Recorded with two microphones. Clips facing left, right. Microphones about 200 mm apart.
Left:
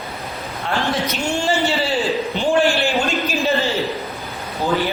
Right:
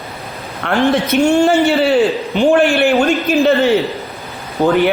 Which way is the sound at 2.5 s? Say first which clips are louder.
Right 5 dB; 60° right (ahead or behind).